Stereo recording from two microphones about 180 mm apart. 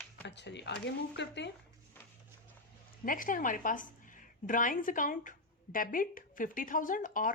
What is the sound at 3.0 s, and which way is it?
A woman's voice, 50° left (ahead or behind).